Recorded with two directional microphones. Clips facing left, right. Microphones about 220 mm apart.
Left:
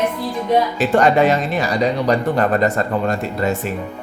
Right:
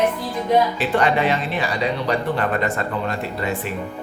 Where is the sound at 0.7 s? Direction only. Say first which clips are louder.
Left 5 dB; 45° left (ahead or behind).